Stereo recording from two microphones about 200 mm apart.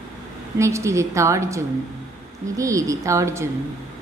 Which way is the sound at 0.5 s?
15° right (ahead or behind).